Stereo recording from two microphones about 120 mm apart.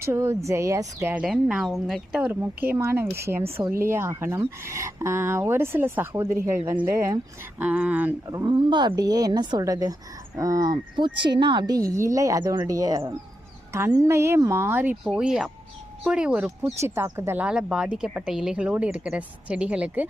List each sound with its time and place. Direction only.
0.0 s speech: 20° right (ahead or behind)
1.2 s speech: 5° right (ahead or behind)
2.3 s speech: 20° right (ahead or behind)
7.6 s speech: 10° right (ahead or behind)
8.4 s speech: 40° right (ahead or behind); by 16.5 s 10° right (ahead or behind)
16.8 s speech: 20° right (ahead or behind)
17.4 s speech: 5° right (ahead or behind)